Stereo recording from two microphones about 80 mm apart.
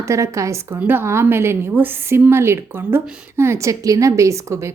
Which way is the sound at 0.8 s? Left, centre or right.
Right.